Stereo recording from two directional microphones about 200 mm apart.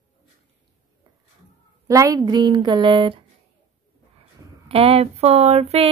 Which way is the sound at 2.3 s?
20° right (ahead or behind).